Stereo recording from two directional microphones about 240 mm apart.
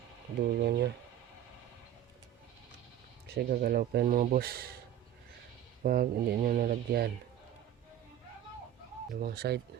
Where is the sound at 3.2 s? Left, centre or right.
Right.